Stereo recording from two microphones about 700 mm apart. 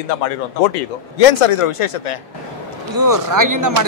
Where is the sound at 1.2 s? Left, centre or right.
Left.